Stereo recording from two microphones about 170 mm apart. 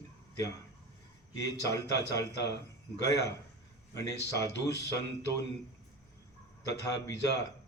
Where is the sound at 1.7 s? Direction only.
20° left (ahead or behind).